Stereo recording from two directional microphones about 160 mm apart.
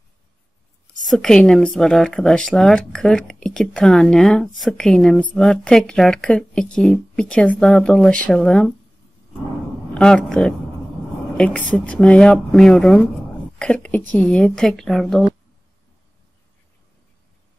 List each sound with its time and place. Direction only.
1.0 s speech: 5° left (ahead or behind)
9.9 s speech: 5° left (ahead or behind)